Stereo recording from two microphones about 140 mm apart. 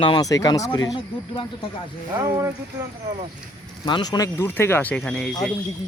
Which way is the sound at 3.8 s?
35° left (ahead or behind).